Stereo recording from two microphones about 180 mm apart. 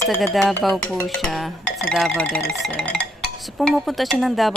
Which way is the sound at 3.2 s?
Centre (ahead or behind).